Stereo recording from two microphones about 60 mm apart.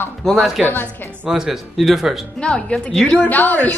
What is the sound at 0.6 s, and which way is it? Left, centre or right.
Speech, left.